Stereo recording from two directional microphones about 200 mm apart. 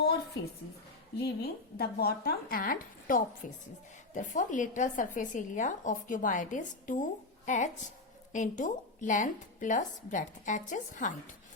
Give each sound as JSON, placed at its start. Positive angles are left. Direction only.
{"t": 1.2, "sound": "a woman's voice", "side_deg": 50}